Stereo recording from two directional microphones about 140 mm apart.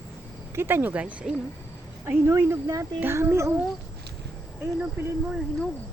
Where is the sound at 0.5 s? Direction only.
15° right (ahead or behind).